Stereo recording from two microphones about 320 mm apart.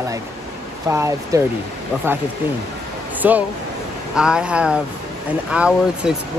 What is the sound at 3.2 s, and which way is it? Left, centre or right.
Speech, centre.